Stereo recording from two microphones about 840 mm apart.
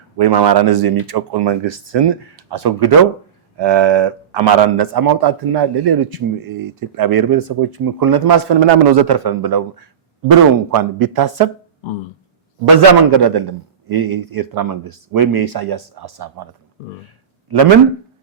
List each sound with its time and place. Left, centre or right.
0.2 s a man's voice: right
10.8 s a man's voice: right
12.6 s a man's voice: right